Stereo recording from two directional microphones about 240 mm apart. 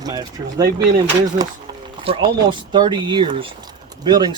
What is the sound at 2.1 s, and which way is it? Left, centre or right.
Speech, right.